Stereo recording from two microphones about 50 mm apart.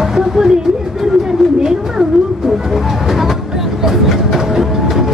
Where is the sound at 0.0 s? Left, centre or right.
Centre.